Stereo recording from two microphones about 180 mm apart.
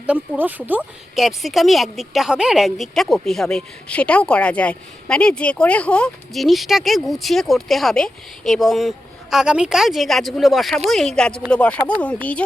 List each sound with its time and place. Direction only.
0.1 s speech: 10° right (ahead or behind); by 12.4 s 5° left (ahead or behind)